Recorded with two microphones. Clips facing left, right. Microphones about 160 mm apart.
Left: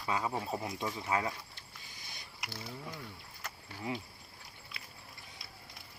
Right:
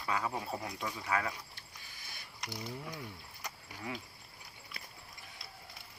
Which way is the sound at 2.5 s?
15° right (ahead or behind).